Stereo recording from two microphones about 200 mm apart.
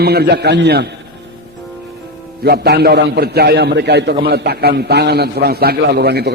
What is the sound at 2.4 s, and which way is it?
A man's voice, 55° right (ahead or behind).